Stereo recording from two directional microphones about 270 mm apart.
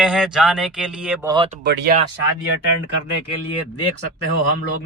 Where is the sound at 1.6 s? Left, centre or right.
Right.